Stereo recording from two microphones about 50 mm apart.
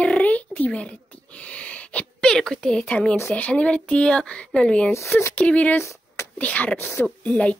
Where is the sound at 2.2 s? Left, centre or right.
Centre; by 6.8 s left.